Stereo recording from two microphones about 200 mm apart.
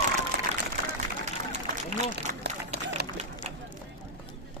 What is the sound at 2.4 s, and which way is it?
Run, 55° right (ahead or behind).